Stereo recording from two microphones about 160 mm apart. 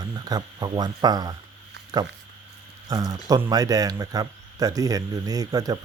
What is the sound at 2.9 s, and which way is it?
Speech, 25° right (ahead or behind).